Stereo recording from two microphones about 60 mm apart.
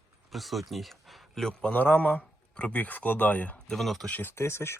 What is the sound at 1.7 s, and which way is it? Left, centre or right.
Speech, left.